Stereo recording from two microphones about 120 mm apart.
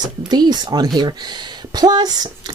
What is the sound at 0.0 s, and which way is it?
Speech, 35° right (ahead or behind).